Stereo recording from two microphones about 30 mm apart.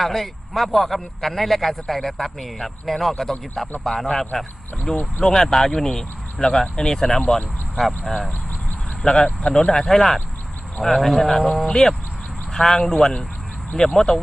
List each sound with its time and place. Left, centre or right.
0.0 s a man's voice: centre; by 7.2 s left
7.8 s speech: centre
9.2 s speech: left
9.8 s a man's voice: centre
11.7 s speech: left